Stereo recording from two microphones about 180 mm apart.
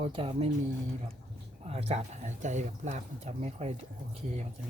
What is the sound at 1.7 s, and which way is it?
Speech, 35° right (ahead or behind).